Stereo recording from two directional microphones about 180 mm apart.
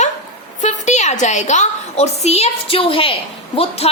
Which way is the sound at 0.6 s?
40° left (ahead or behind).